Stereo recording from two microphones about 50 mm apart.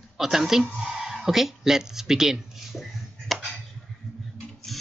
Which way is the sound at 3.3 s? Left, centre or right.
Centre.